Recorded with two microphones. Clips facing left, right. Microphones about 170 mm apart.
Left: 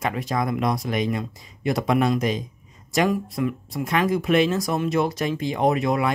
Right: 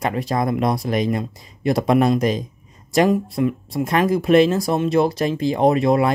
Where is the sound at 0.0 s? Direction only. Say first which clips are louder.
Right 4 dB; 35° right (ahead or behind).